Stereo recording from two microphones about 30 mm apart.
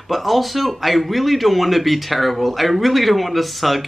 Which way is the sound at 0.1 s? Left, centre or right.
Centre.